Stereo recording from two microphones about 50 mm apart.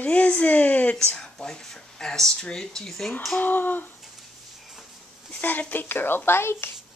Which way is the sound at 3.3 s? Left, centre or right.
Left.